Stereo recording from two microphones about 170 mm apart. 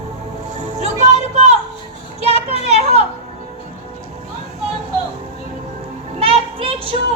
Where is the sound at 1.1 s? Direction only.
40° right (ahead or behind).